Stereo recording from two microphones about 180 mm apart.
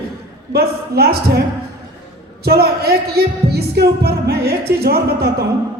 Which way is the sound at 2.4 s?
60° right (ahead or behind).